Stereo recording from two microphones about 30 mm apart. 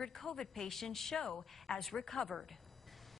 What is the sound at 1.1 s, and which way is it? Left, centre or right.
Speech, left.